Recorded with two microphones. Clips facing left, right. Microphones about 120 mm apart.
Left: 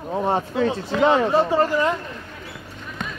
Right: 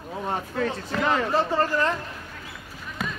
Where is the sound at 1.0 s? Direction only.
30° left (ahead or behind).